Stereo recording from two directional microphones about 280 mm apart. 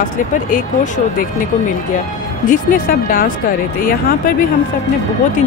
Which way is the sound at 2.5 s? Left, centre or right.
Left.